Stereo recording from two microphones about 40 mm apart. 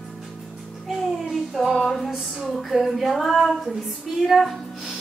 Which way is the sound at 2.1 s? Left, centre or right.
Centre.